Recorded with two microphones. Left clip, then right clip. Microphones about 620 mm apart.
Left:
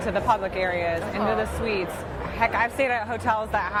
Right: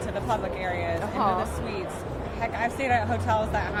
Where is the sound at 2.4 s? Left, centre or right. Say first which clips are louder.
Left 6 dB; left.